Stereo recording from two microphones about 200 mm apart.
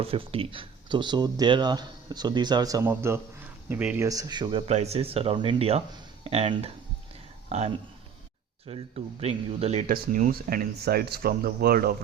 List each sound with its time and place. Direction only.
0.0 s speech: 30° right (ahead or behind)
8.7 s speech: 30° right (ahead or behind); by 11.9 s 50° right (ahead or behind)